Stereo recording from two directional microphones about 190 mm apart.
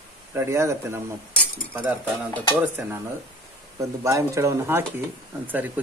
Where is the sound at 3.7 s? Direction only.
15° right (ahead or behind).